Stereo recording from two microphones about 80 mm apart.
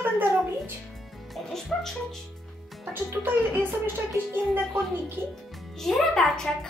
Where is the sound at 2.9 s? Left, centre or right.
Right.